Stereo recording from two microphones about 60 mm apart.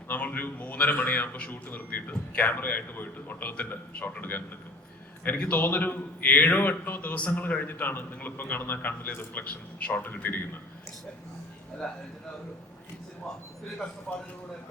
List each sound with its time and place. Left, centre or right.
0.1 s a man's voice: left
11.8 s speech: centre
14.1 s speech: centre